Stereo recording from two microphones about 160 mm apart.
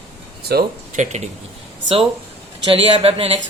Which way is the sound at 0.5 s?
80° right.